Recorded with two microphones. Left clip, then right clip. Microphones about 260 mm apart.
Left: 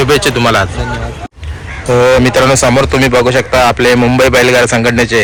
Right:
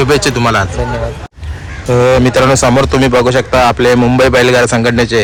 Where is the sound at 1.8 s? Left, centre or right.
Centre.